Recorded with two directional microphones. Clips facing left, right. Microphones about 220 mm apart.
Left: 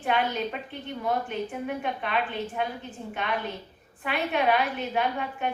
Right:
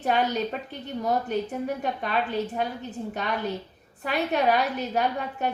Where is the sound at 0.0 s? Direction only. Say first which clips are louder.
Right 2 dB; 40° right (ahead or behind).